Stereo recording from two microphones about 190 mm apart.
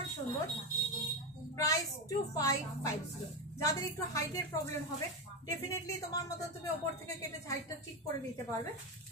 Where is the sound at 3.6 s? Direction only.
15° left (ahead or behind).